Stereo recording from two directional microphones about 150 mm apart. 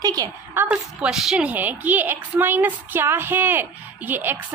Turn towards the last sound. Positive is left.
turn(degrees=-10)  # may be behind; listen again after turning